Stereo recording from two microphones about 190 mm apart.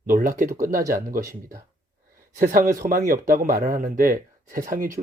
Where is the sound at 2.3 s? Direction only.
45° right (ahead or behind).